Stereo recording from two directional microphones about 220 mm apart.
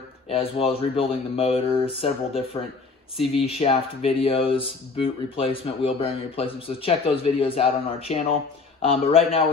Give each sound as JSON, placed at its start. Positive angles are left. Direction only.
{"t": 0.3, "sound": "speech", "side_deg": 25}